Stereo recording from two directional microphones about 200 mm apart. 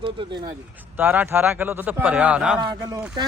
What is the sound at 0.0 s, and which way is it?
Speech, 25° right (ahead or behind).